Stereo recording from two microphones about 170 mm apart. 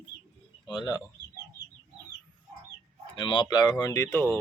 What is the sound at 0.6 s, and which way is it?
Speech, 25° left (ahead or behind).